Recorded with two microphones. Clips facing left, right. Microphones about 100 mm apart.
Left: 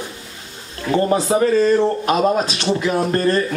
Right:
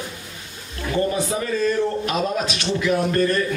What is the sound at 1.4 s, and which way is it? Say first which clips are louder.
A man's voice: left 6 dB; 35° left (ahead or behind).